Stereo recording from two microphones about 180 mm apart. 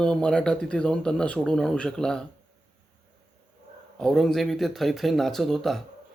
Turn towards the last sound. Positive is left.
turn(degrees=0)  # may be behind; listen again after turning